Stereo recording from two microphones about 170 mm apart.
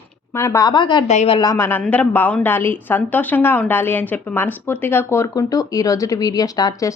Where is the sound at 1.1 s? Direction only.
40° left (ahead or behind).